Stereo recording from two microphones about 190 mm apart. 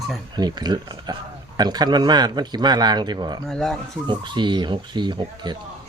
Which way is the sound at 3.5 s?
5° left (ahead or behind).